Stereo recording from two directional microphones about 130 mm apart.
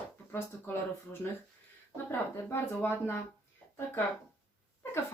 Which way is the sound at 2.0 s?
15° left (ahead or behind).